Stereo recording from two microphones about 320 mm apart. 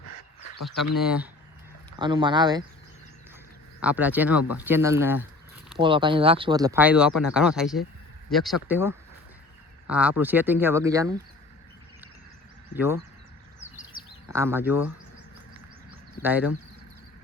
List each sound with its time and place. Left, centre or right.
0.1 s a sound: left
0.6 s speech: centre
2.0 s speech: centre
3.8 s speech: centre
12.7 s speech: centre
13.6 s bird: left
14.3 s speech: centre
16.2 s speech: centre